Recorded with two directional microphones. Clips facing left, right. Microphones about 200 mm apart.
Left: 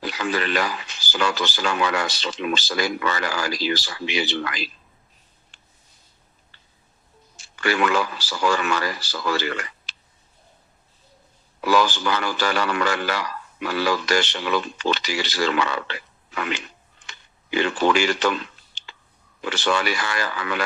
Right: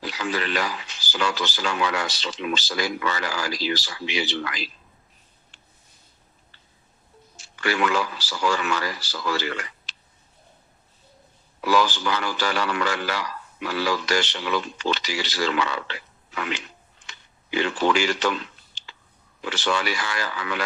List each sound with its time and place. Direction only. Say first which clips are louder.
0.0 s speech: left 2 dB; 55° left (ahead or behind)
7.6 s speech: left 2 dB; 55° left (ahead or behind)
11.6 s speech: left 2 dB; 55° left (ahead or behind)
17.1 s a sound: left 2 dB; 55° left (ahead or behind)
19.4 s speech: left 2 dB; 55° left (ahead or behind)